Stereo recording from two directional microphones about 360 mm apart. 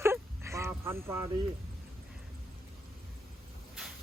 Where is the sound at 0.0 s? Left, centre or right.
Centre.